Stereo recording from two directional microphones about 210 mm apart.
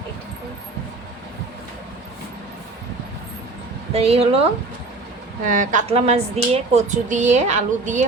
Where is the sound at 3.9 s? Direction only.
30° right (ahead or behind).